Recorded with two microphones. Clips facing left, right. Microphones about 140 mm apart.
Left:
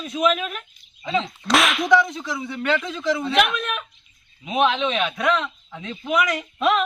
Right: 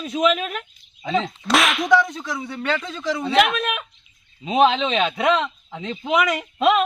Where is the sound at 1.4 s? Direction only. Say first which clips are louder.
Left 2 dB; centre (ahead or behind).